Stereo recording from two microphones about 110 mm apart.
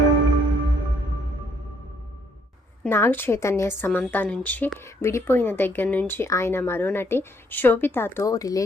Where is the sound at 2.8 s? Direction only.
20° left (ahead or behind).